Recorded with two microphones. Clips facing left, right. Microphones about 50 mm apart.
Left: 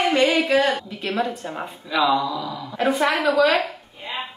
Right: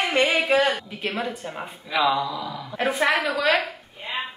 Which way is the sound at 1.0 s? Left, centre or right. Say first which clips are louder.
Left 3 dB; centre.